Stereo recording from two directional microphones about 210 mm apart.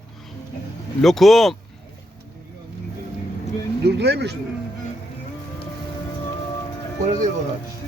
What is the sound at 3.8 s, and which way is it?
Speech, 50° right (ahead or behind).